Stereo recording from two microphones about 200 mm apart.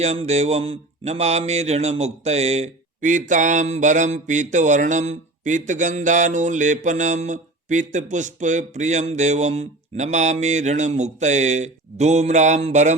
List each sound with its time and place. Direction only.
0.0 s mantra: 35° right (ahead or behind)